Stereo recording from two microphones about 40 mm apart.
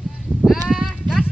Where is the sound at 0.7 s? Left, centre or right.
Centre.